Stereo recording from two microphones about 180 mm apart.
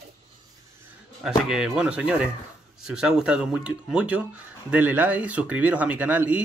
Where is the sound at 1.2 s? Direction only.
5° right (ahead or behind).